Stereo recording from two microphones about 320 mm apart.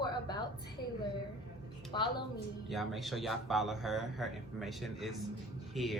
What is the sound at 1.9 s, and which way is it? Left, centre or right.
Speech, centre.